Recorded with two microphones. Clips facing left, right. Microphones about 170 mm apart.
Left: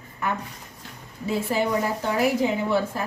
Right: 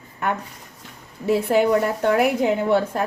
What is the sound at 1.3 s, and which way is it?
Speech, 65° right (ahead or behind).